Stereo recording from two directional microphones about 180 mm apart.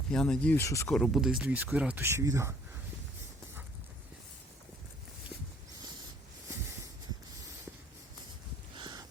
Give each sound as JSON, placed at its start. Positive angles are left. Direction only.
{"t": 0.1, "sound": "speech", "side_deg": 5}
{"t": 0.9, "sound": "speech", "side_deg": 0}
{"t": 8.7, "sound": "a sound", "side_deg": -25}